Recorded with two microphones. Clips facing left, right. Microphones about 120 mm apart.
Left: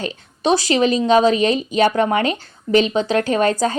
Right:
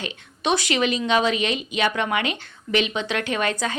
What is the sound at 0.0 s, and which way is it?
Speech, 35° left (ahead or behind).